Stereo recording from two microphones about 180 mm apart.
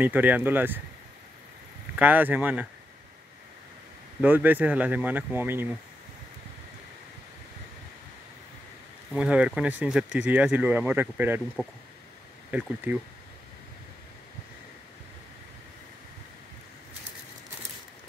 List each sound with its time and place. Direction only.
0.0 s speech: 10° right (ahead or behind)
2.0 s speech: 10° right (ahead or behind)
4.2 s speech: 10° right (ahead or behind)
9.1 s speech: 5° right (ahead or behind)
12.4 s speech: 10° right (ahead or behind)